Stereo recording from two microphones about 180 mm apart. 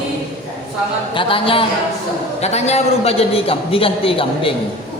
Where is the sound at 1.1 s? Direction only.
30° left (ahead or behind).